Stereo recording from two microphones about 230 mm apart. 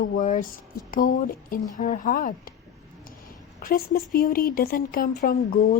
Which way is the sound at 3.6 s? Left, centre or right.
Left.